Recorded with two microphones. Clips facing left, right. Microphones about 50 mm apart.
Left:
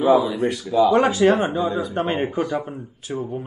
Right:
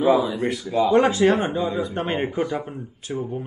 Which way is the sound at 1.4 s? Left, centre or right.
Left.